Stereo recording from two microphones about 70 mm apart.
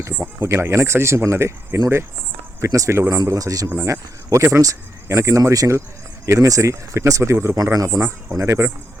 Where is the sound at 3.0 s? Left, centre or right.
Right.